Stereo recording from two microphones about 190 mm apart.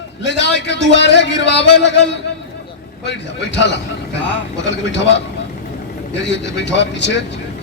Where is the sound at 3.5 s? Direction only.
65° left (ahead or behind).